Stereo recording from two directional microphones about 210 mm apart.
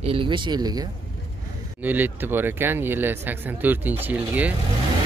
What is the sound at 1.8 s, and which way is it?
Speech, 10° right (ahead or behind).